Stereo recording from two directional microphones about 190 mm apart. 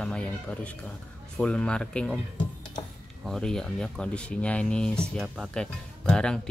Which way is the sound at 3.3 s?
5° left (ahead or behind).